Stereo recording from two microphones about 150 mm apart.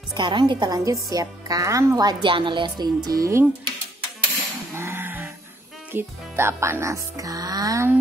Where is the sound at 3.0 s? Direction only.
20° right (ahead or behind).